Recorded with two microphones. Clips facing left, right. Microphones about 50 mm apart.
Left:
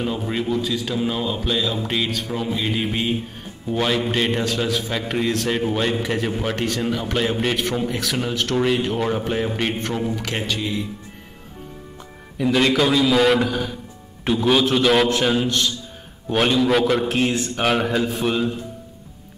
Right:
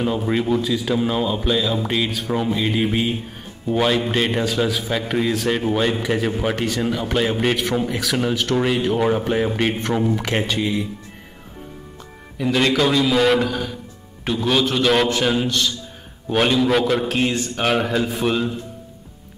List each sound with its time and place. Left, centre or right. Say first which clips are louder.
0.0 s a man's voice: right 3 dB; centre
10.1 s a man's voice: right 4 dB; right
10.6 s speech: right 3 dB; centre
12.4 s a man's voice: even; centre